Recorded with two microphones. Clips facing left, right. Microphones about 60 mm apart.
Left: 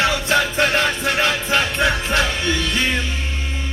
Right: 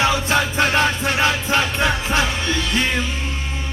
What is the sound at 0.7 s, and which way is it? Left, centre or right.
Music, centre.